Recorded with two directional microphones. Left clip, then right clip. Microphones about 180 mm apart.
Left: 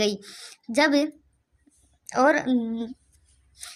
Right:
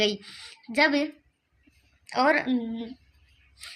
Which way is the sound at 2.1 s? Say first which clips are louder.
Left 2 dB; 50° left (ahead or behind).